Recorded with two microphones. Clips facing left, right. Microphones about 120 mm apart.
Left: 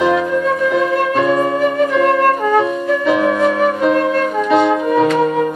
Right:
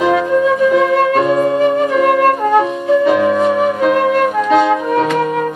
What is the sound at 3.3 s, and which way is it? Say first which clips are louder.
Music: right 2 dB; 15° right (ahead or behind).